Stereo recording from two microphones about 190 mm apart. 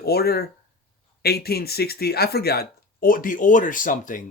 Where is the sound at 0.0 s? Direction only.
55° left (ahead or behind).